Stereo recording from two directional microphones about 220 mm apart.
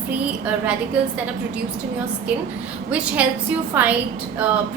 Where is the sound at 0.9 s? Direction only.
5° right (ahead or behind).